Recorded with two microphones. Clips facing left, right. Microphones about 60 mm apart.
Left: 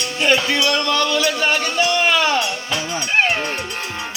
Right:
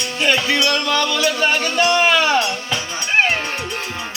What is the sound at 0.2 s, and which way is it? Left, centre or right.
Music, centre.